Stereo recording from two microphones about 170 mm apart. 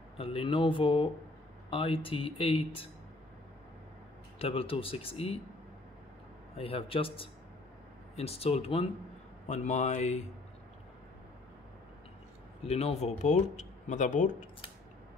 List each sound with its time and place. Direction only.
0.2 s speech: 35° left (ahead or behind)
4.4 s speech: 35° left (ahead or behind)
6.5 s speech: 35° left (ahead or behind)
12.6 s speech: 40° left (ahead or behind)